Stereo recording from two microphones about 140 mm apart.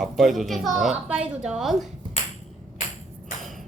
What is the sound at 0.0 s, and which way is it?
A woman's voice, centre (ahead or behind).